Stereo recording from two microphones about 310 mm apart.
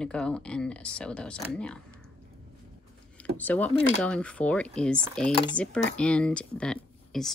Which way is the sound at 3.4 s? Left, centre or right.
Centre.